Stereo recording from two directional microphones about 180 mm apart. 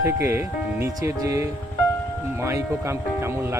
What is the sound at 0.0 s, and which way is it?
Speech, 15° right (ahead or behind).